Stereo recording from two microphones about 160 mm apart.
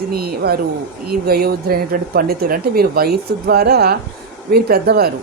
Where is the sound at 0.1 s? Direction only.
75° right (ahead or behind).